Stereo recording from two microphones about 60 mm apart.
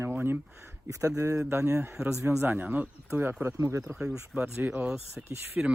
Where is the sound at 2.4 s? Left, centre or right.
Right.